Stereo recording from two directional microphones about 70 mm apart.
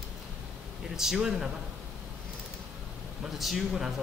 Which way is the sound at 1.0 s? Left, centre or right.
Centre.